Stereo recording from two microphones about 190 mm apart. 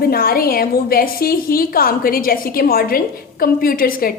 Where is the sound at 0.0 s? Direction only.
50° left (ahead or behind).